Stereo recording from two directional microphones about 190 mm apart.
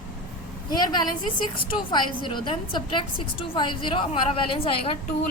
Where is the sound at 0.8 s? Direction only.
20° left (ahead or behind).